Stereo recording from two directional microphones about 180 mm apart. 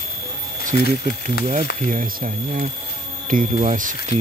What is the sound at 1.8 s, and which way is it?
Speech, 50° right (ahead or behind).